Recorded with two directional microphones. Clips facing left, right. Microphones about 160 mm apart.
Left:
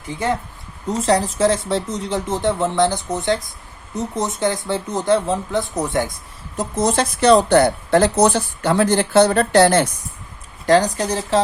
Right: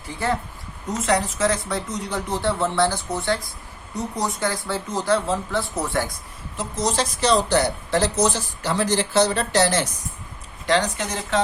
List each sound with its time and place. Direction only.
0.1 s speech: 20° left (ahead or behind)
0.9 s speech: 30° left (ahead or behind)
6.6 s speech: 55° left (ahead or behind)
10.7 s speech: 40° left (ahead or behind)